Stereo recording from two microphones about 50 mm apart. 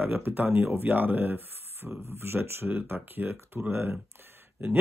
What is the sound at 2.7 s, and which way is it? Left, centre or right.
Speech, right.